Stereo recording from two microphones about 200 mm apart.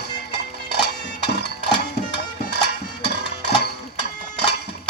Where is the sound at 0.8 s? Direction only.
55° left (ahead or behind).